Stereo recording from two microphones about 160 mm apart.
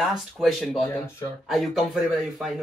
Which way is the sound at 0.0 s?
Centre (ahead or behind).